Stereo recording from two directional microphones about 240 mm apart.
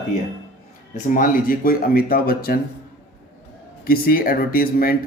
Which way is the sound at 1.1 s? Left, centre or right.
Left.